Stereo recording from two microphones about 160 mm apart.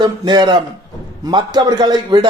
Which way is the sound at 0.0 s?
30° right (ahead or behind).